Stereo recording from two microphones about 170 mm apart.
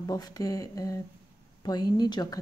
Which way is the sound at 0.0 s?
20° left (ahead or behind).